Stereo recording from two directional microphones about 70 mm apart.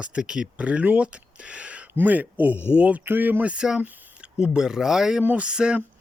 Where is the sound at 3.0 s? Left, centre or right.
Right; by 5.2 s centre.